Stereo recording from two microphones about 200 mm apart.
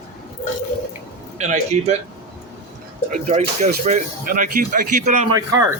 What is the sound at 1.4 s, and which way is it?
Speech, 35° right (ahead or behind).